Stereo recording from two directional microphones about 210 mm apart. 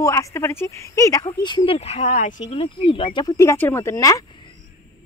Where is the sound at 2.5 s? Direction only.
25° left (ahead or behind).